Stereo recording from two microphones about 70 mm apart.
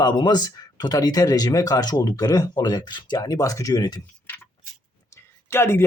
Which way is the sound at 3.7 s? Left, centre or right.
Left.